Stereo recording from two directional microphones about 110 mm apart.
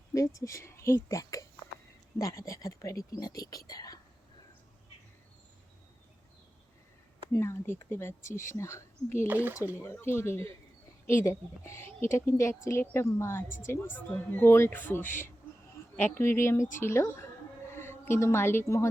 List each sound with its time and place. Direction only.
0.1 s a woman's voice: 30° left (ahead or behind)
7.3 s a woman's voice: 25° left (ahead or behind)
9.2 s speech: 15° right (ahead or behind)
9.7 s a woman's voice: 25° left (ahead or behind)